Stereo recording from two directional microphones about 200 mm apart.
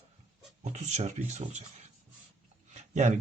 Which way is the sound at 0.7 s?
35° right (ahead or behind).